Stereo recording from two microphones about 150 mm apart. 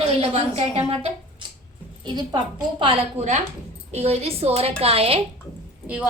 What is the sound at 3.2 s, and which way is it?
A child's voice, 50° right (ahead or behind).